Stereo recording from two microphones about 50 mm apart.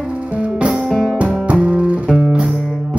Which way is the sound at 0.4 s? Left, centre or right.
Right.